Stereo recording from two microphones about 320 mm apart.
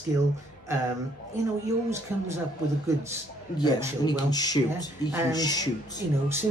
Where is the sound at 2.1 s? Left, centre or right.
Centre.